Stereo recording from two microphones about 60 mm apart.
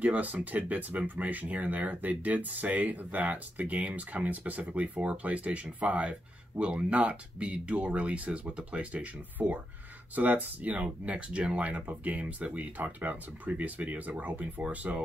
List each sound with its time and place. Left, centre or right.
0.0 s speech: right